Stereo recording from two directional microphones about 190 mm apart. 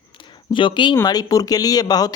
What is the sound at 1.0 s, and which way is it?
Speech, 20° left (ahead or behind).